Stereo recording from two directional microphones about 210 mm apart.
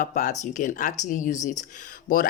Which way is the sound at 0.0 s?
35° left (ahead or behind).